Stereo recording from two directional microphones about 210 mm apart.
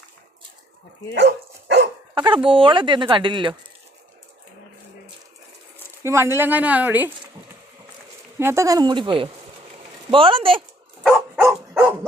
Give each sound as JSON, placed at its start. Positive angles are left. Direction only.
{"t": 1.1, "sound": "dog", "side_deg": -55}
{"t": 2.1, "sound": "speech", "side_deg": -20}
{"t": 6.0, "sound": "speech", "side_deg": -15}
{"t": 8.4, "sound": "speech", "side_deg": -10}
{"t": 11.3, "sound": "dog", "side_deg": -10}